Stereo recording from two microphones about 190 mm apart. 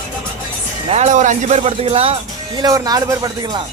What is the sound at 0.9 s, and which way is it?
A man's voice, 40° right (ahead or behind).